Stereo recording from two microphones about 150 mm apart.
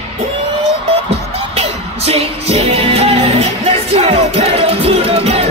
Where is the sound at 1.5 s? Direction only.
45° right (ahead or behind).